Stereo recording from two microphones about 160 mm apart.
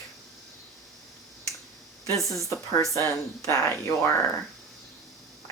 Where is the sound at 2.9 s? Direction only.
20° left (ahead or behind).